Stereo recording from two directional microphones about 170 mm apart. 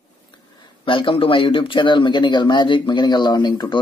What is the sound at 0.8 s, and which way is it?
Speech, 30° left (ahead or behind).